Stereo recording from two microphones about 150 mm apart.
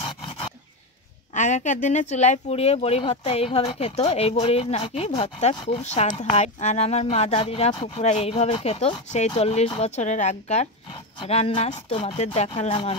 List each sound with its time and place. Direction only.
0.0 s dog: 35° left (ahead or behind)
1.3 s speech: 50° left (ahead or behind)